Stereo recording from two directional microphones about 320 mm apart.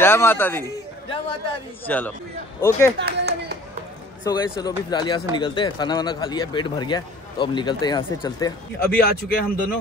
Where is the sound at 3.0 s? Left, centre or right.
Right.